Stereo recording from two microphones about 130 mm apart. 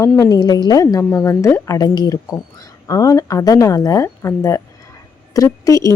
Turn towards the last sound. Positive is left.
turn(degrees=25)  # may be behind; listen again after turning